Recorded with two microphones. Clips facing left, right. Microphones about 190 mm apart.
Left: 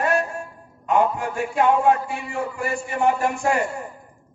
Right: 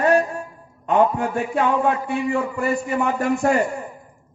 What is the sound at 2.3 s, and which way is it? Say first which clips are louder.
Speech: right 3 dB; 60° right (ahead or behind).